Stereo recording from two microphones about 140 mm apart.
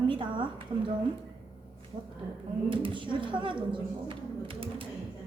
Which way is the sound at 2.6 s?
40° right (ahead or behind).